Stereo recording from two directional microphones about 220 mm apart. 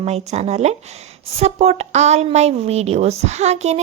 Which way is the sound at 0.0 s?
30° right (ahead or behind).